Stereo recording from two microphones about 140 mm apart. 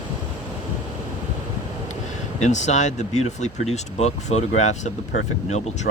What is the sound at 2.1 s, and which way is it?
Speech, 60° left (ahead or behind).